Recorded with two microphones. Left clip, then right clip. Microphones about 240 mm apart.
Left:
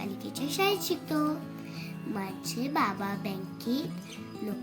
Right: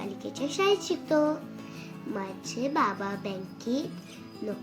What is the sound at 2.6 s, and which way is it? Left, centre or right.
Speech, left.